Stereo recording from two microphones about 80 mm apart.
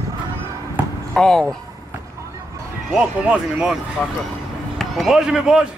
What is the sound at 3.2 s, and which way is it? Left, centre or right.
Speech, centre.